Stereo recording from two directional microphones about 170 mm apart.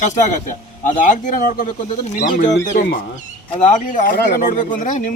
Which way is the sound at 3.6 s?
50° left (ahead or behind).